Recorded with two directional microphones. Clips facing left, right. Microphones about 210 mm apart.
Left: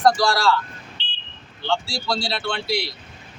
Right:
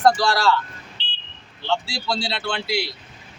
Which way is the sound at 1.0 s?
35° right (ahead or behind).